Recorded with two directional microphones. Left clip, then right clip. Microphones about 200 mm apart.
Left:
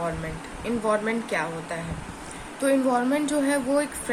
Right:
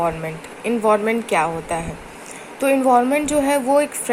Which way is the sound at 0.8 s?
25° right (ahead or behind).